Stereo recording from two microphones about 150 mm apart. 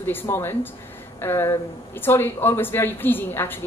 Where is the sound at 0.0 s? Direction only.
15° left (ahead or behind).